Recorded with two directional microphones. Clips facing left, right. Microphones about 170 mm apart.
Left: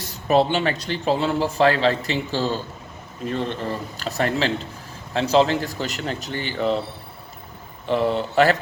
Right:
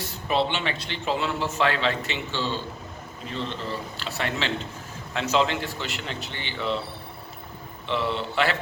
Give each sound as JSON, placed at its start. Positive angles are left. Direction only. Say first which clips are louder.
{"t": 0.0, "sound": "speech", "louder": "left 6 dB", "side_deg": 40}
{"t": 3.2, "sound": "speech", "louder": "left 6 dB", "side_deg": 50}
{"t": 7.9, "sound": "speech", "louder": "left 6 dB", "side_deg": 45}